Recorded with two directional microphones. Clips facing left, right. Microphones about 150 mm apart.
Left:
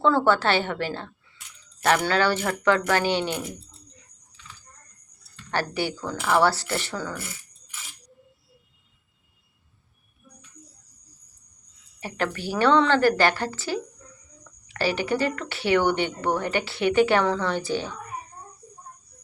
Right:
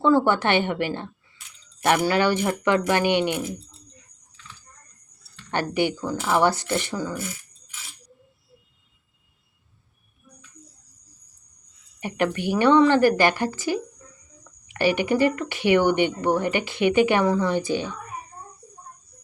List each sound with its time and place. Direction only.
0.0 s speech: 15° right (ahead or behind)
5.5 s speech: 20° right (ahead or behind)
11.9 s speech: 15° right (ahead or behind)